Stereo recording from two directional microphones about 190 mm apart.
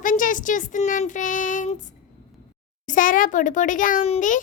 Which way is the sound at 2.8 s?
45° left (ahead or behind).